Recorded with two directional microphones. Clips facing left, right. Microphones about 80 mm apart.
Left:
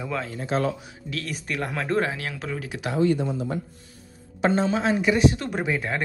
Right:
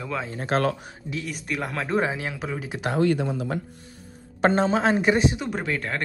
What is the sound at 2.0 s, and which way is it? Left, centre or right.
Speech, centre.